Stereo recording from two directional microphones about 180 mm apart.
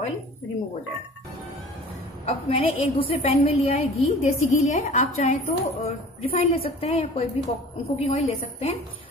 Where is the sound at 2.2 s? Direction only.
30° left (ahead or behind).